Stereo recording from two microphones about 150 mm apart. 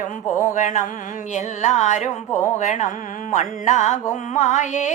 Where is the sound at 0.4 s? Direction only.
55° left (ahead or behind).